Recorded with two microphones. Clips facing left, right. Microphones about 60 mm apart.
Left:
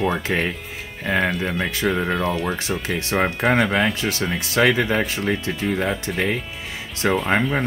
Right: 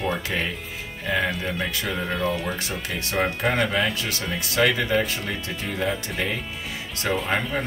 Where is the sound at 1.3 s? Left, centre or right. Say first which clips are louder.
Left 3 dB; centre.